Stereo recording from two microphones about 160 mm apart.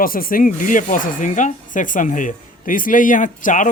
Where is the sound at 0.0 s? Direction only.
65° left (ahead or behind).